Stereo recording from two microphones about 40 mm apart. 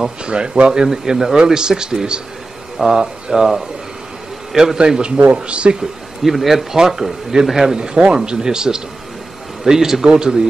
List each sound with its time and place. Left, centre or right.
0.2 s speech: right
0.8 s a man's voice: centre
4.7 s speech: centre
5.8 s speech: centre